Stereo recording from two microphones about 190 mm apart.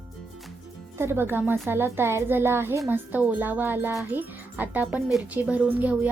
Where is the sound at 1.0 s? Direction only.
10° right (ahead or behind).